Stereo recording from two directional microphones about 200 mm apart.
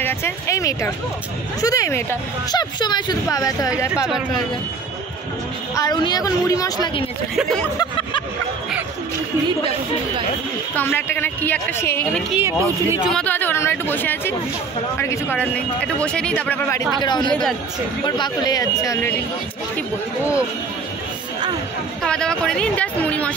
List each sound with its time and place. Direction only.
0.0 s speech: 15° left (ahead or behind)
3.9 s speech: 5° right (ahead or behind)
5.8 s a woman's voice: 20° left (ahead or behind)
7.3 s speech: 5° left (ahead or behind)
10.7 s speech: 10° left (ahead or behind)
12.3 s speech: 10° right (ahead or behind)
13.1 s speech: 10° left (ahead or behind)
17.0 s a woman's voice: 20° left (ahead or behind)
17.3 s speech: 5° left (ahead or behind)
18.0 s speech: 20° left (ahead or behind)
22.0 s speech: 5° left (ahead or behind)